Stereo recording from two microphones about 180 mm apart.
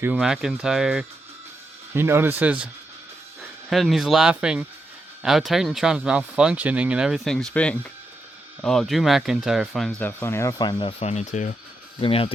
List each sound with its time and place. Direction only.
0.0 s speech: 5° right (ahead or behind)
1.9 s speech: 15° right (ahead or behind)
3.7 s speech: centre (ahead or behind)
10.0 s speech: 10° left (ahead or behind)
11.0 s speech: 40° left (ahead or behind)
11.9 s speech: 30° left (ahead or behind)